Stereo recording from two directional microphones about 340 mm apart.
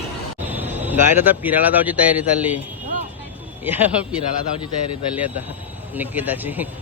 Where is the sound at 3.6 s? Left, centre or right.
Centre.